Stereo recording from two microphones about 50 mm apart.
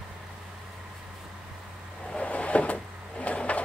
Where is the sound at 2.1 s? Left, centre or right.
Left.